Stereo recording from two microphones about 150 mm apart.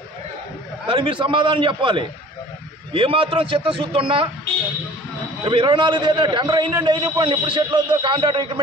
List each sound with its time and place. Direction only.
0.8 s a man's voice: 35° right (ahead or behind)
5.4 s a man's voice: 35° right (ahead or behind)